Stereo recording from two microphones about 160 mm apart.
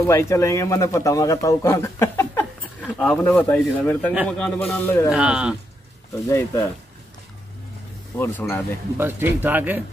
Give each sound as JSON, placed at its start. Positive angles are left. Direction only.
{"t": 0.0, "sound": "speech", "side_deg": 15}
{"t": 5.1, "sound": "speech", "side_deg": -5}
{"t": 6.1, "sound": "speech", "side_deg": 20}
{"t": 8.2, "sound": "speech", "side_deg": 15}
{"t": 8.9, "sound": "speech", "side_deg": -15}